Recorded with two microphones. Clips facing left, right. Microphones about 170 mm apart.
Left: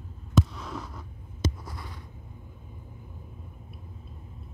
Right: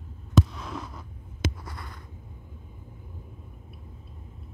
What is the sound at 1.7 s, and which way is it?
Writing, 60° right (ahead or behind).